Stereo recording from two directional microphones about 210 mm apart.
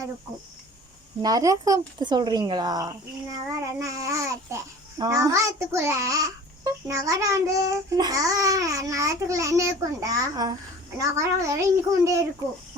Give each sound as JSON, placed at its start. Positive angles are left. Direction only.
{"t": 1.2, "sound": "speech", "side_deg": -15}